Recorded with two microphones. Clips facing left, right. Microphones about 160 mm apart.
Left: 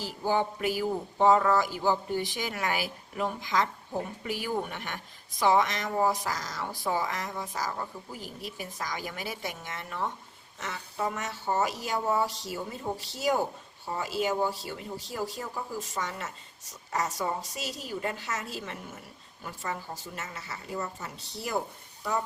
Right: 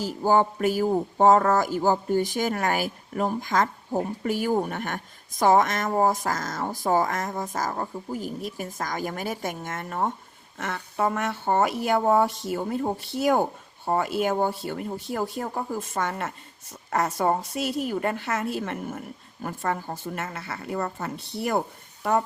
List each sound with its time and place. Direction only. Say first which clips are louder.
0.0 s speech: right 7 dB; 45° right (ahead or behind)